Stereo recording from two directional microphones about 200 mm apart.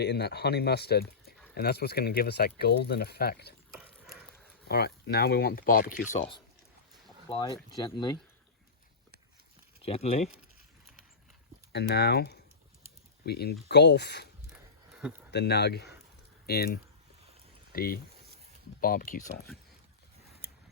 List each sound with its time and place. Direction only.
0.0 s speech: 55° left (ahead or behind)
3.7 s dog: centre (ahead or behind)
4.7 s speech: 55° left (ahead or behind)
7.3 s speech: 20° left (ahead or behind)
9.8 s speech: 30° left (ahead or behind)
11.7 s speech: 55° left (ahead or behind)
14.5 s a sound: 5° right (ahead or behind)
15.3 s speech: 55° left (ahead or behind)